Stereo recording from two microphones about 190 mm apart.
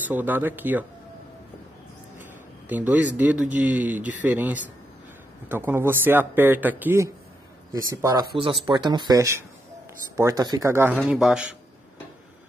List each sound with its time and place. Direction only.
0.0 s speech: 10° right (ahead or behind)
2.7 s speech: 10° right (ahead or behind)
11.1 s a man's voice: 5° right (ahead or behind)